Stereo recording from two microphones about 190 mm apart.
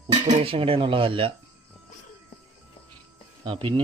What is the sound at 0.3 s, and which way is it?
A man's voice, 30° right (ahead or behind).